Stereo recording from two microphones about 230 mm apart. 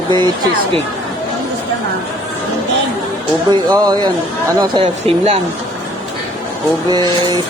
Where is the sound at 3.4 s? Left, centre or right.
Centre.